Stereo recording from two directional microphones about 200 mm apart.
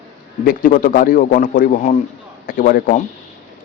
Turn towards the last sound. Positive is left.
turn(degrees=45)  # may be behind; listen again after turning